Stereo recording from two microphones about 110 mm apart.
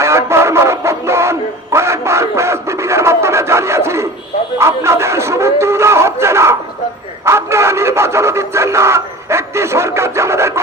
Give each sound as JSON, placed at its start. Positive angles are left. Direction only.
{"t": 0.0, "sound": "music", "side_deg": -25}
{"t": 4.5, "sound": "a sound", "side_deg": -25}
{"t": 7.3, "sound": "radio", "side_deg": -25}